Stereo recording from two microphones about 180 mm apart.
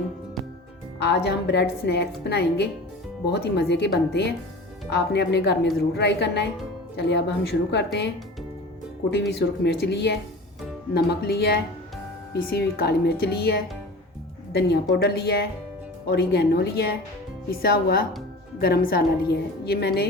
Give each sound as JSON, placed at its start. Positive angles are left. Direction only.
{"t": 0.9, "sound": "a woman's voice", "side_deg": 70}
{"t": 9.3, "sound": "a woman's voice", "side_deg": 70}